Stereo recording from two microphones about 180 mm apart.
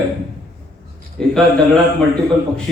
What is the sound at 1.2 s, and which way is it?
Speech, 5° left (ahead or behind).